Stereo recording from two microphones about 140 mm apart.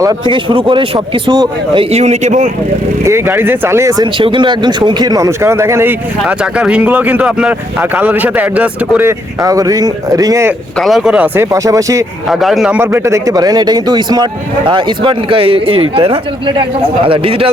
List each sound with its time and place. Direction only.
0.3 s a man's voice: 35° right (ahead or behind); by 2.5 s 55° right (ahead or behind)
3.0 s speech: 20° right (ahead or behind)
10.8 s speech: centre (ahead or behind)
11.3 s a man's voice: 25° right (ahead or behind)
12.3 s speech: centre (ahead or behind)
12.8 s a man's voice: 15° right (ahead or behind); by 17.5 s 40° right (ahead or behind)